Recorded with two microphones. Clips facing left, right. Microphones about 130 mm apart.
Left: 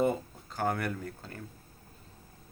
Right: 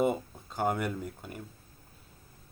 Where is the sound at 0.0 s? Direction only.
20° right (ahead or behind).